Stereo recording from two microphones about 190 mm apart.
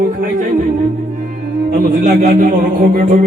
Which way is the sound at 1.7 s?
50° right (ahead or behind).